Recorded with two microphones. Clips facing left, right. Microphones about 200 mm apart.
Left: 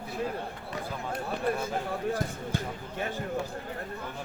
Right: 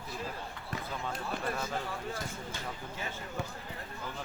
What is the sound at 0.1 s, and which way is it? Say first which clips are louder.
Run: left 7 dB; 55° left (ahead or behind).